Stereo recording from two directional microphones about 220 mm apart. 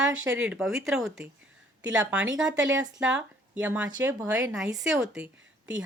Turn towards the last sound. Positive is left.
turn(degrees=-5)  # may be behind; listen again after turning